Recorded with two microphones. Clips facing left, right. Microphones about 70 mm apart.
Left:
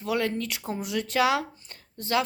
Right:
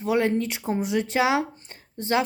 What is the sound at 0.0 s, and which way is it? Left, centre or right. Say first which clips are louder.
A woman's voice: right 5 dB; right.